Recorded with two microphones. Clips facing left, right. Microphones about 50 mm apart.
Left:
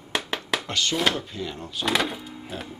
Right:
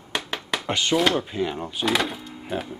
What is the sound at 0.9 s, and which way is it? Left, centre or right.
Speech, centre.